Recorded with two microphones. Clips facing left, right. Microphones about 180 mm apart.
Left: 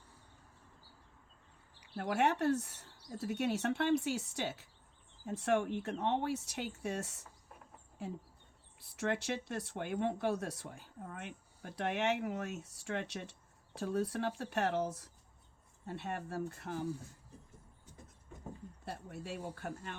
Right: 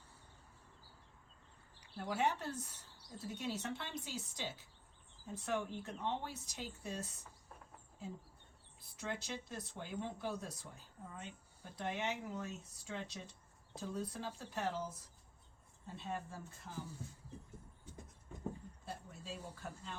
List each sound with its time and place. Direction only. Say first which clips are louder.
2.0 s speech: left 5 dB; 70° left (ahead or behind)
8.8 s speech: left 8 dB; 70° left (ahead or behind)
18.9 s speech: left 5 dB; 65° left (ahead or behind)